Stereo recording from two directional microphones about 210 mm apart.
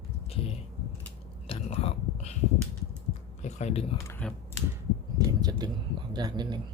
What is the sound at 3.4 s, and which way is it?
Typing, 35° left (ahead or behind).